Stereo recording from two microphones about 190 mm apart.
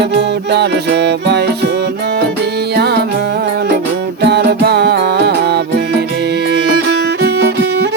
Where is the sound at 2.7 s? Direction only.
60° right (ahead or behind).